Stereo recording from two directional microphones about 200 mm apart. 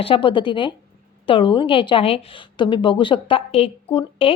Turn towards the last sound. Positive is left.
turn(degrees=25)  # may be behind; listen again after turning